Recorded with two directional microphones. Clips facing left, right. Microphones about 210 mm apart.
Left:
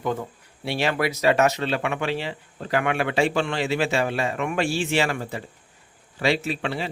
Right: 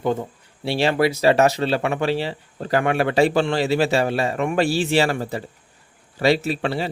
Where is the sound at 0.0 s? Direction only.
30° right (ahead or behind).